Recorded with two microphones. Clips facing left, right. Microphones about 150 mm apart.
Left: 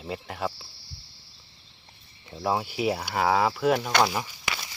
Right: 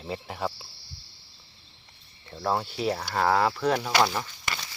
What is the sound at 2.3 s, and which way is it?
Speech, 10° left (ahead or behind).